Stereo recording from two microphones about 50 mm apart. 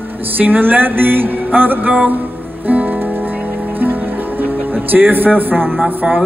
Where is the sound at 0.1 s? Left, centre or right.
Right.